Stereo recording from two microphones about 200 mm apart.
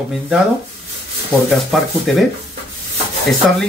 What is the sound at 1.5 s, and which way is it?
Speech, centre (ahead or behind).